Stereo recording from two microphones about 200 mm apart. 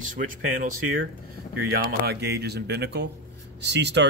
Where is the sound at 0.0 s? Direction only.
40° right (ahead or behind).